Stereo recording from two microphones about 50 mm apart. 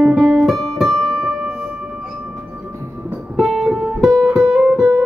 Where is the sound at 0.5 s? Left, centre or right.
Centre.